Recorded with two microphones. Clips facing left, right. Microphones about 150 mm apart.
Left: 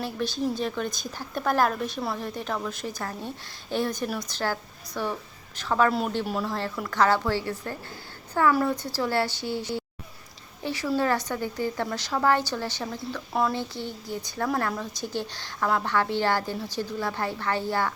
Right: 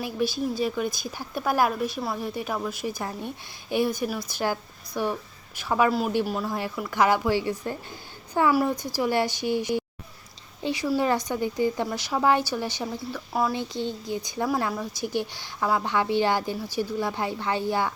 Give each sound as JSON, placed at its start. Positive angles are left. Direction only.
{"t": 0.0, "sound": "speech", "side_deg": -10}
{"t": 5.9, "sound": "speech", "side_deg": 0}